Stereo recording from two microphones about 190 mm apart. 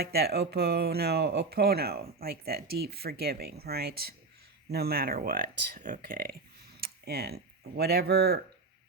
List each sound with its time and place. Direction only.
0.0 s speech: 55° right (ahead or behind)